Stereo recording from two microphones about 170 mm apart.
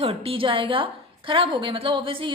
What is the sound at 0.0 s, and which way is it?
A woman's voice, 35° right (ahead or behind).